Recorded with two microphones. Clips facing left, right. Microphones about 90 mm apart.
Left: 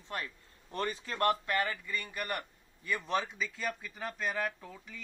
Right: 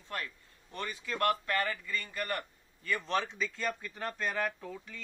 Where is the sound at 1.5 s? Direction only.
15° left (ahead or behind).